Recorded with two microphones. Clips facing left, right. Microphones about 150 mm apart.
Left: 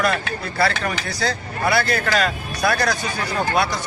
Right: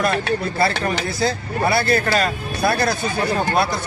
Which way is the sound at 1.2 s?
30° right (ahead or behind).